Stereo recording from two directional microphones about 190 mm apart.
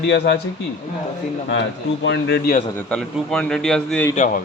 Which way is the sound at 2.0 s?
65° left (ahead or behind).